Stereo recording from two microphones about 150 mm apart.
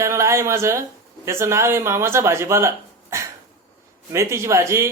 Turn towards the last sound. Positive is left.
turn(degrees=-20)  # may be behind; listen again after turning